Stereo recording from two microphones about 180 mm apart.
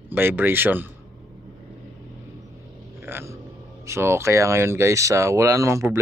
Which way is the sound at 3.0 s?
15° right (ahead or behind).